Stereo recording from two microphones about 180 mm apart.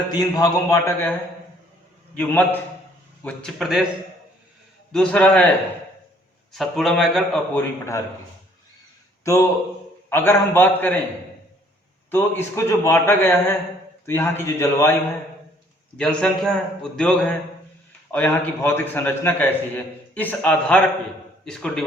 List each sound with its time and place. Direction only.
0.1 s a man's voice: 20° left (ahead or behind)
2.1 s a man's voice: 10° left (ahead or behind)
4.9 s a man's voice: 5° left (ahead or behind)
6.5 s a man's voice: centre (ahead or behind)
7.5 s a man's voice: 15° left (ahead or behind)
10.1 s a man's voice: 10° left (ahead or behind)
12.1 s a man's voice: 10° left (ahead or behind)
16.0 s a man's voice: 5° left (ahead or behind)